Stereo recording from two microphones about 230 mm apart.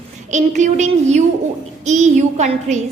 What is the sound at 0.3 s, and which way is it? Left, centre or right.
A woman's voice, right.